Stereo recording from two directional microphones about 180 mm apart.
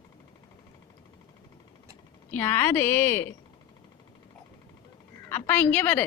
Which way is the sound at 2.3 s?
10° left (ahead or behind).